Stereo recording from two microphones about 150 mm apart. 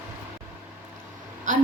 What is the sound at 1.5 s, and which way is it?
Speech, 55° right (ahead or behind).